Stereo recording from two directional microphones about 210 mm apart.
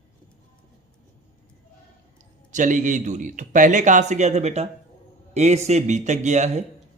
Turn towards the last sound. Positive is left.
turn(degrees=-35)  # may be behind; listen again after turning